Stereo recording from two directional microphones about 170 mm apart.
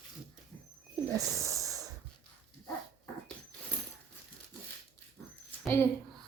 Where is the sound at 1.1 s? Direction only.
20° right (ahead or behind).